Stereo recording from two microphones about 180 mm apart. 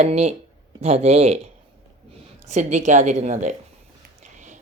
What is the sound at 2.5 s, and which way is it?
Speech, 40° right (ahead or behind).